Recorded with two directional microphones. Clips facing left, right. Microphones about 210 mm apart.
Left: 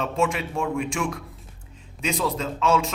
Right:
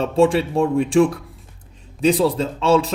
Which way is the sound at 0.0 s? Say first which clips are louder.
Right 8 dB; 30° right (ahead or behind).